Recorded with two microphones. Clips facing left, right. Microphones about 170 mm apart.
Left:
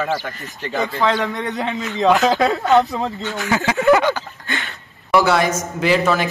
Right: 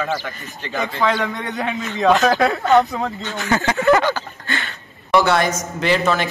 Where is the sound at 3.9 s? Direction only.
15° left (ahead or behind).